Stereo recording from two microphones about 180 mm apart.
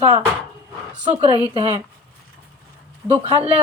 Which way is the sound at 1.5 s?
30° right (ahead or behind).